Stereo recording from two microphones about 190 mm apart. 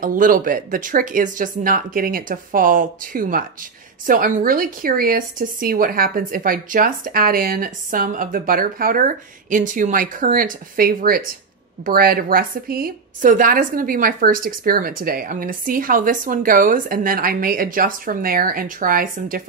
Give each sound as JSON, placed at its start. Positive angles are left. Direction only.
{"t": 0.0, "sound": "a woman's voice", "side_deg": -45}